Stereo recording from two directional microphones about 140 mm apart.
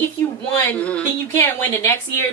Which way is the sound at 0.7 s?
10° left (ahead or behind).